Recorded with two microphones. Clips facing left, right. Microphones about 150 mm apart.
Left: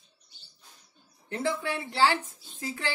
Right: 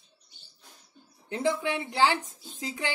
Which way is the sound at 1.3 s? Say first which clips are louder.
Right 2 dB; 20° right (ahead or behind).